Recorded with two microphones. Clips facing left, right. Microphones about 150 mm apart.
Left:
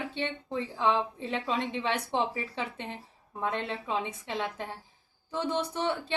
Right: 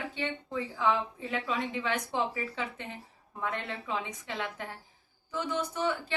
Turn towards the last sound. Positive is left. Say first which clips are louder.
# left 1 dB
turn(degrees=25)  # may be behind; listen again after turning